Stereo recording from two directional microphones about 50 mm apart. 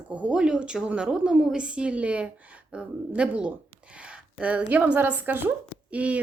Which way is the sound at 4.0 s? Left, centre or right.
Right.